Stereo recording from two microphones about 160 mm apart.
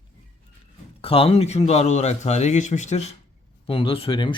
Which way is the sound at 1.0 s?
35° left (ahead or behind).